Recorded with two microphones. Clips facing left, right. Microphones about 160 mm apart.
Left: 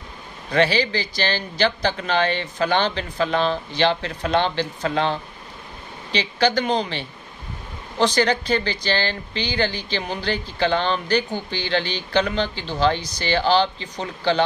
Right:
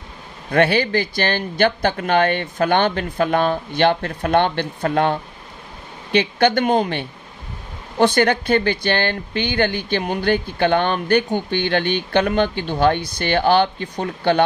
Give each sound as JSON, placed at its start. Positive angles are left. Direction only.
{"t": 0.5, "sound": "speech", "side_deg": -55}